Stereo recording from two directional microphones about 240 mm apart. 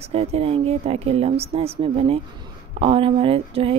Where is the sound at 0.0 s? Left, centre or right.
Right.